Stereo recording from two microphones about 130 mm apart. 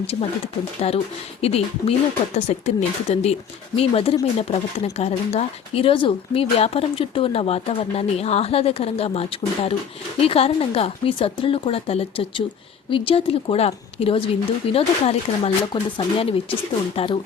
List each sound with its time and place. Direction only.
0.8 s speech: 50° left (ahead or behind)